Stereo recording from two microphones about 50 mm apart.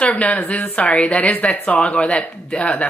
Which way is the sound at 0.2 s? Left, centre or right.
Left.